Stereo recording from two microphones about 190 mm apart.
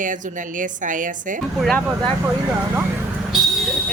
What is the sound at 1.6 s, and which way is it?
Speech, 5° left (ahead or behind).